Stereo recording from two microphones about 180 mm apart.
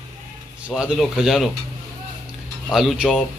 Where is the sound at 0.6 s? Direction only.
5° right (ahead or behind).